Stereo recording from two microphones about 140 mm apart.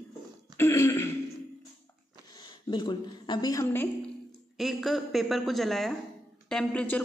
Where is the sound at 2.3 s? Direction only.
35° left (ahead or behind).